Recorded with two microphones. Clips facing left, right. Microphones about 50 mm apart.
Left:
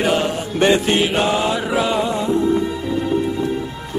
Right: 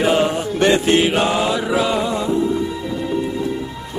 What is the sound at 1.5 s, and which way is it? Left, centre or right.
Mantra, centre.